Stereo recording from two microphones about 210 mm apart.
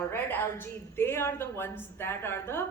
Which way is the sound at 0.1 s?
10° left (ahead or behind).